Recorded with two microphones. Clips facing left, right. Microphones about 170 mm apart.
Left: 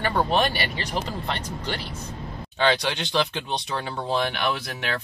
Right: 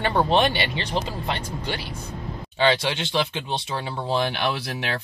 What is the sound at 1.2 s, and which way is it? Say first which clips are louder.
Speech: right 1 dB; 10° right (ahead or behind).